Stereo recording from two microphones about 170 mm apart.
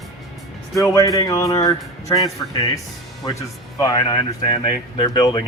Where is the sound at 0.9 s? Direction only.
20° left (ahead or behind).